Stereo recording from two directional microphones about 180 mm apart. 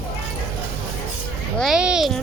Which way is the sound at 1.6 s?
5° right (ahead or behind).